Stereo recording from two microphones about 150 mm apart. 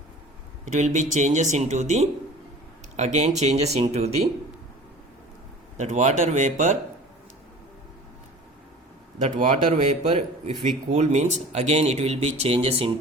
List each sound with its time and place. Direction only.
0.6 s speech: 55° right (ahead or behind)
5.7 s speech: 55° right (ahead or behind)
9.3 s speech: 60° right (ahead or behind); by 12.9 s 40° right (ahead or behind)